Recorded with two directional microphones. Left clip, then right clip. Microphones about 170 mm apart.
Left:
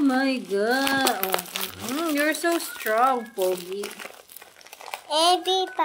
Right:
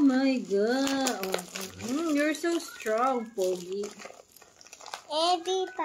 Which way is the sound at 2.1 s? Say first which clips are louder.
Left 5 dB; 25° right (ahead or behind).